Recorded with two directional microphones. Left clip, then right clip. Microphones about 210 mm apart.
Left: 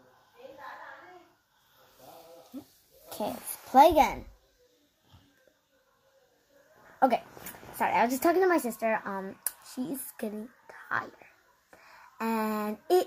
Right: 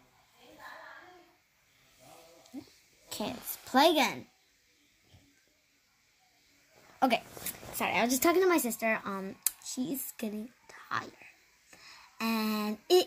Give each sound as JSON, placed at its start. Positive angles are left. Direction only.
{"t": 3.1, "sound": "a woman's voice", "side_deg": -20}
{"t": 7.8, "sound": "a woman's voice", "side_deg": -25}